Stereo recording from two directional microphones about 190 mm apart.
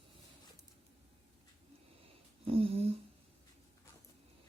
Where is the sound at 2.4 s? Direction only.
30° right (ahead or behind).